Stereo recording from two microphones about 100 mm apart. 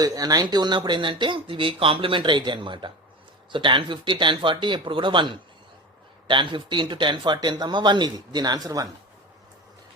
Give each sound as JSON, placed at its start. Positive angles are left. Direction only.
{"t": 0.0, "sound": "speech", "side_deg": -40}